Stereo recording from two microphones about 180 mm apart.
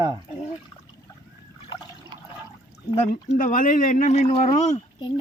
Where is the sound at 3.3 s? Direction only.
45° left (ahead or behind).